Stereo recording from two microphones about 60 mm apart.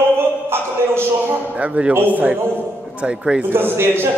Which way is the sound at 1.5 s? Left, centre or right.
Right.